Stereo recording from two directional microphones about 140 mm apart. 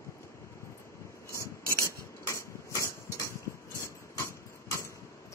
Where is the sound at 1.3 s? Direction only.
20° left (ahead or behind).